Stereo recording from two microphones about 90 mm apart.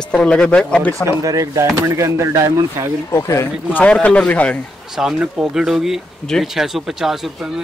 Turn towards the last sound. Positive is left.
turn(degrees=-5)  # may be behind; listen again after turning